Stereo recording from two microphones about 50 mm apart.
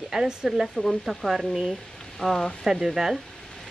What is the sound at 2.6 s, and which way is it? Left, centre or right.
Speech, centre.